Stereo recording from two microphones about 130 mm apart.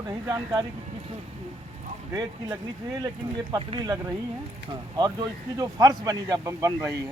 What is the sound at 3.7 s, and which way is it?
Speech, 35° right (ahead or behind).